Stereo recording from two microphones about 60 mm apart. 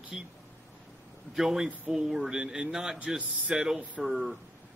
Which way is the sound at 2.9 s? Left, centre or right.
Right.